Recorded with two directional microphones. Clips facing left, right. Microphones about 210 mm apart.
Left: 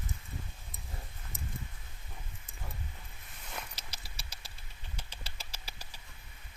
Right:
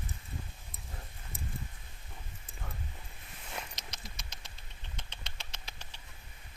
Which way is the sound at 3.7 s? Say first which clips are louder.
Right 3 dB; 30° left (ahead or behind).